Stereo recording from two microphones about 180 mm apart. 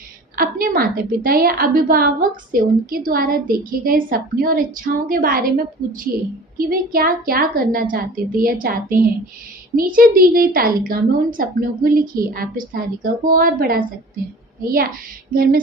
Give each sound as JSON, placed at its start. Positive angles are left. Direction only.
{"t": 0.3, "sound": "a woman's voice", "side_deg": -55}
{"t": 6.6, "sound": "a woman's voice", "side_deg": -55}